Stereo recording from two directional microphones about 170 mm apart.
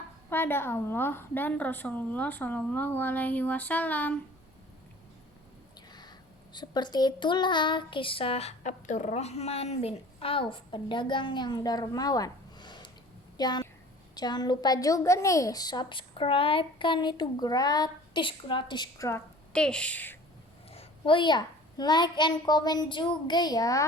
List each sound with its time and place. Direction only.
0.3 s a woman's voice: 15° left (ahead or behind)
5.9 s a child's voice: 25° left (ahead or behind)
19.5 s a woman's voice: 5° left (ahead or behind)
20.7 s a woman's voice: 30° left (ahead or behind)